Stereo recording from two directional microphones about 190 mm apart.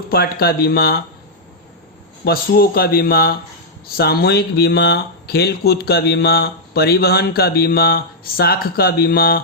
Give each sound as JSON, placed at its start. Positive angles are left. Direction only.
{"t": 0.1, "sound": "speech", "side_deg": 55}
{"t": 2.2, "sound": "speech", "side_deg": 55}